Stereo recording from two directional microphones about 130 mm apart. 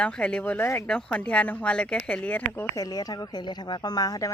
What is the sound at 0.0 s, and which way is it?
Speech, 10° left (ahead or behind).